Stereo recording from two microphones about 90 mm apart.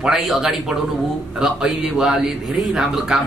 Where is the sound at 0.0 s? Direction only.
5° right (ahead or behind).